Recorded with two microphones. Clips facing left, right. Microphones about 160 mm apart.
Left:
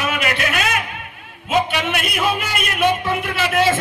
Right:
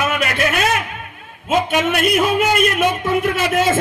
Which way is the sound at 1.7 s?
45° right (ahead or behind).